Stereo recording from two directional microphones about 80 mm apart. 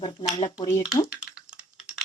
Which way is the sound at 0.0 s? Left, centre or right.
Left.